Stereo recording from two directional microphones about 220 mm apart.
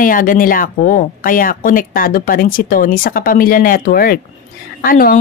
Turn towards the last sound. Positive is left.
turn(degrees=40)  # may be behind; listen again after turning